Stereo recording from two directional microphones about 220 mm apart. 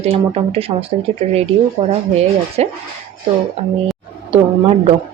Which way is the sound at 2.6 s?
30° right (ahead or behind).